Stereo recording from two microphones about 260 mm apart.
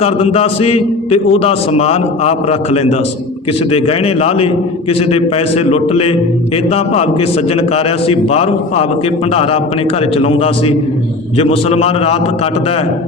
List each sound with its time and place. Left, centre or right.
0.0 s a man's voice: left